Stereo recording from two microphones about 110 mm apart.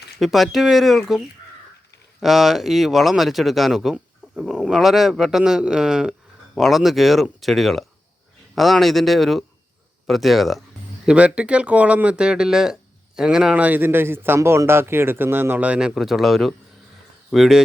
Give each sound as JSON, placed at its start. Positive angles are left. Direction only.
{"t": 0.2, "sound": "speech", "side_deg": 0}
{"t": 2.2, "sound": "speech", "side_deg": -5}